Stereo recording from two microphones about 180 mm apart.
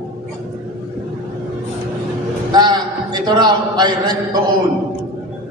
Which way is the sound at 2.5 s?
25° right (ahead or behind).